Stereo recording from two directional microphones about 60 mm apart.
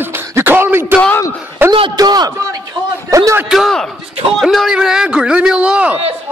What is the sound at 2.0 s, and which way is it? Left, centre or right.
Speech, right.